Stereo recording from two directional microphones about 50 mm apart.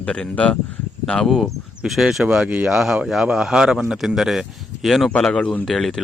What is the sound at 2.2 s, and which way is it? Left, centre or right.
Speech, right.